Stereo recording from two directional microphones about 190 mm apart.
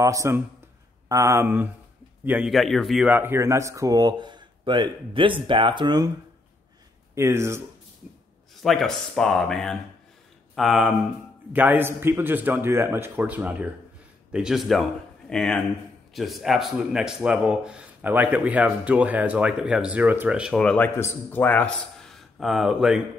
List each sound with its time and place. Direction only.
0.0 s a man's voice: 15° right (ahead or behind)
7.2 s a man's voice: 15° right (ahead or behind)
8.6 s a man's voice: centre (ahead or behind)